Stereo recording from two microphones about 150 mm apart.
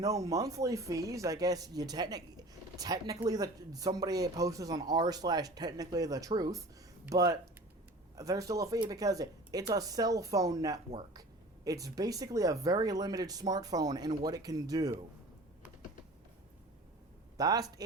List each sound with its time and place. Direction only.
0.0 s speech: 25° right (ahead or behind)
17.3 s speech: 25° right (ahead or behind)